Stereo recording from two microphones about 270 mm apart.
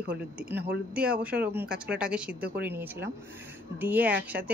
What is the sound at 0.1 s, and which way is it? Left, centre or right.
Speech, centre.